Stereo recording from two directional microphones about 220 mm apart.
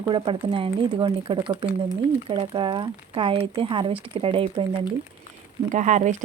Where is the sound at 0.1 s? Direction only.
25° right (ahead or behind).